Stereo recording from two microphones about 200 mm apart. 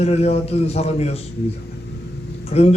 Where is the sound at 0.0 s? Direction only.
30° left (ahead or behind).